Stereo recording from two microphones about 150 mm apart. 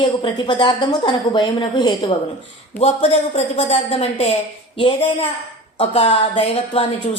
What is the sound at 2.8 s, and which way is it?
A woman's voice, 45° left (ahead or behind).